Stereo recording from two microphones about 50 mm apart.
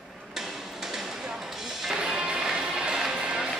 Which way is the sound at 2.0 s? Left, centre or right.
Right.